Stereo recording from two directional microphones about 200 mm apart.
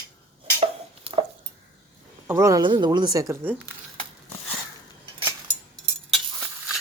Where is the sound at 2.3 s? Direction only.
15° right (ahead or behind).